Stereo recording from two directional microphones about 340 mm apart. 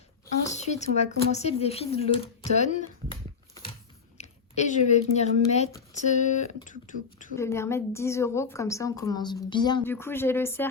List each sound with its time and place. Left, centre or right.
0.4 s speech: centre
3.1 s a sound: centre
4.2 s speech: centre
7.3 s a woman's voice: centre